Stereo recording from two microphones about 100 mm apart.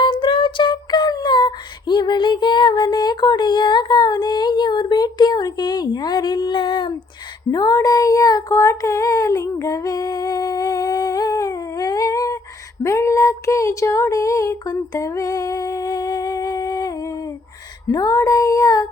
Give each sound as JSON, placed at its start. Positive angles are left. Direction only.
{"t": 0.0, "sound": "female singing", "side_deg": 55}
{"t": 7.5, "sound": "child singing", "side_deg": 40}
{"t": 12.8, "sound": "a sound", "side_deg": 30}
{"t": 17.9, "sound": "child singing", "side_deg": 40}